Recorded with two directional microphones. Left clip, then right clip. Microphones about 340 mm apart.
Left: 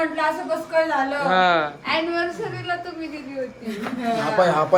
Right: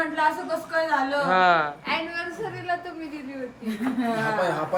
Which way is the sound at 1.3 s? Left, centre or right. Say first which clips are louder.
Left 1 dB; centre.